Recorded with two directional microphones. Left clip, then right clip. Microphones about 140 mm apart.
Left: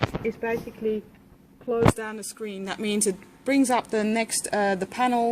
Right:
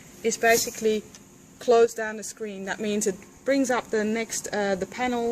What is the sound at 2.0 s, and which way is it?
Speech, 75° left (ahead or behind).